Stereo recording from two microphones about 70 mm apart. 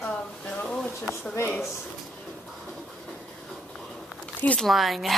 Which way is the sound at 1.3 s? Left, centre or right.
Left.